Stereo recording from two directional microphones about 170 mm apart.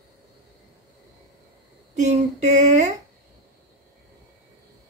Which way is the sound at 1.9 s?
45° right (ahead or behind).